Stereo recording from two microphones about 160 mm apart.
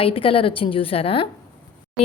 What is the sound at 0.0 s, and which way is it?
Speech, 35° left (ahead or behind).